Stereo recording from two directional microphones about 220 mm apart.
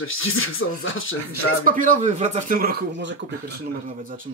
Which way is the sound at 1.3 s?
40° right (ahead or behind).